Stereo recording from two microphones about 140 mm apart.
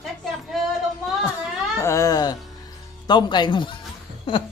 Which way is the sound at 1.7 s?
20° left (ahead or behind).